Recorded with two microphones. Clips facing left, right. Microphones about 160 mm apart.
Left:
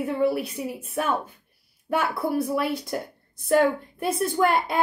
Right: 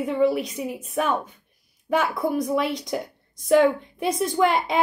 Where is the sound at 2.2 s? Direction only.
15° right (ahead or behind).